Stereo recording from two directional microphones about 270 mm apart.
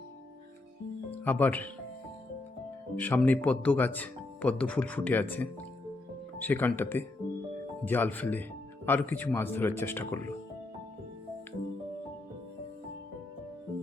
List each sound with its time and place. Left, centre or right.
1.2 s speech: centre
2.9 s speech: centre